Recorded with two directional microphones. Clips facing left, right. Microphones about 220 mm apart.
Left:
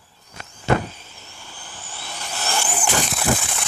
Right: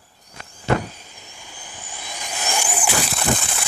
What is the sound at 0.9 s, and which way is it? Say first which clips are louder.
Vehicle: even; 15° right (ahead or behind).